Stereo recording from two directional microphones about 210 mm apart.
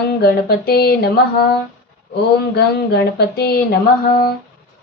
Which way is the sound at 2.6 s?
50° left (ahead or behind).